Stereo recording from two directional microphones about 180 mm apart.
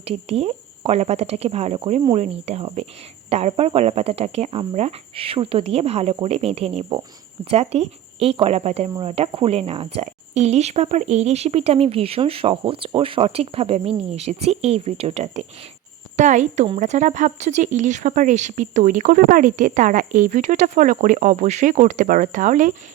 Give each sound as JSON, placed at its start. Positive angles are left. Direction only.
{"t": 0.0, "sound": "speech", "side_deg": -35}